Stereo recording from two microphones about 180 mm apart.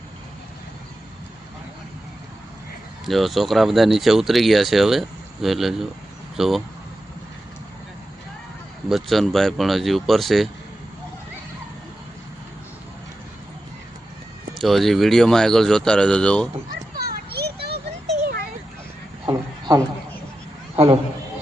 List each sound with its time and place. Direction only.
3.1 s speech: centre (ahead or behind)
8.9 s speech: centre (ahead or behind)
14.6 s speech: centre (ahead or behind)
16.9 s children playing: 55° right (ahead or behind)
20.7 s a man's voice: 30° right (ahead or behind)